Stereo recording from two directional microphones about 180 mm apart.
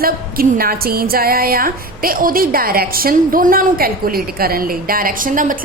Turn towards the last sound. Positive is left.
turn(degrees=-50)  # may be behind; listen again after turning